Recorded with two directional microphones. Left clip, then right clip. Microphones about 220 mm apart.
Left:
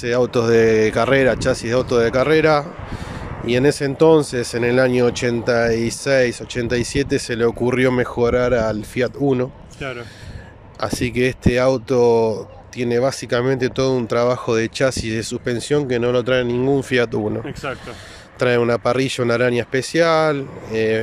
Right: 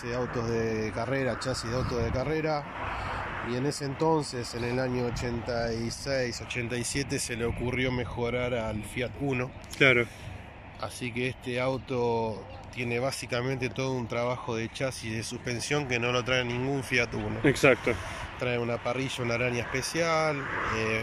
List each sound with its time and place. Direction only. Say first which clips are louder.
0.0 s speech: left 14 dB; 45° left (ahead or behind)
10.8 s speech: left 13 dB; 45° left (ahead or behind)
17.5 s speech: right 6 dB; 15° right (ahead or behind)
18.4 s speech: left 14 dB; 45° left (ahead or behind)